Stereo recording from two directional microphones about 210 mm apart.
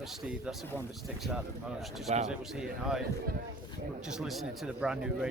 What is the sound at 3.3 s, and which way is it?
Speech, 45° right (ahead or behind).